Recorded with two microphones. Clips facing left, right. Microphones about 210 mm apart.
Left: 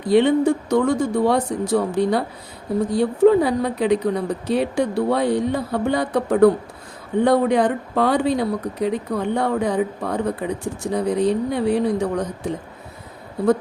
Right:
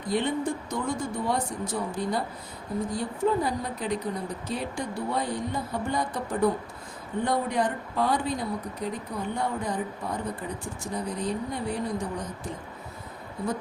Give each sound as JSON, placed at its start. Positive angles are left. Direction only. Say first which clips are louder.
{"t": 0.1, "sound": "speech", "louder": "left 12 dB", "side_deg": 75}